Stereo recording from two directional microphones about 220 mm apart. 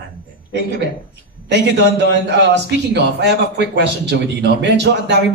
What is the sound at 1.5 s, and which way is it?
A man's voice, 50° right (ahead or behind).